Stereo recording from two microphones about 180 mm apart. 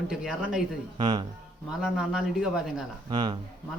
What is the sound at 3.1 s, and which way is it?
Speech, 25° right (ahead or behind).